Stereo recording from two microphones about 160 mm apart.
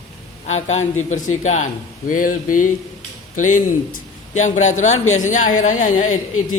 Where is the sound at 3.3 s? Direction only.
55° left (ahead or behind).